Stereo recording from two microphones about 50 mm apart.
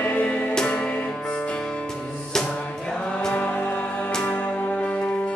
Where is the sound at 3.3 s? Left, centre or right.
Left.